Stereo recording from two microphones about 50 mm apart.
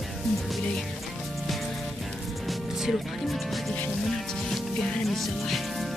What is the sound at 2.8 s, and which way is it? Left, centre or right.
Speech, centre.